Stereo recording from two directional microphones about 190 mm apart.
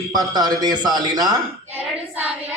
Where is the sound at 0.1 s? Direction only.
20° right (ahead or behind).